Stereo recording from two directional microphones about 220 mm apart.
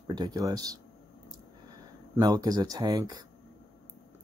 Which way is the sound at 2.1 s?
15° right (ahead or behind).